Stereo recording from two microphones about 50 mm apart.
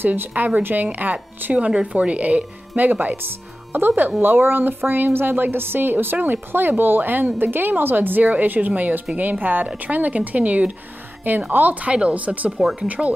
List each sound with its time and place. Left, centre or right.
0.0 s a woman's voice: right
1.7 s a woman's voice: right